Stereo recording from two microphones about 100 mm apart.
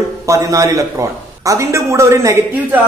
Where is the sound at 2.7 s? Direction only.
20° right (ahead or behind).